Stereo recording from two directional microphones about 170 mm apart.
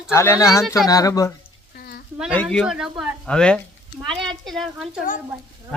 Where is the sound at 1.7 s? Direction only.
60° left (ahead or behind).